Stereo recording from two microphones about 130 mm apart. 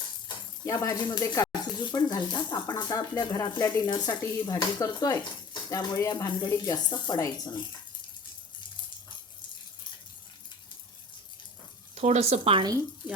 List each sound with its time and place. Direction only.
0.6 s speech: 25° left (ahead or behind)
11.9 s speech: 55° right (ahead or behind)
13.0 s speech: 40° left (ahead or behind)